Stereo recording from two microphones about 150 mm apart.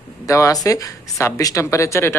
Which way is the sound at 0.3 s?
20° left (ahead or behind).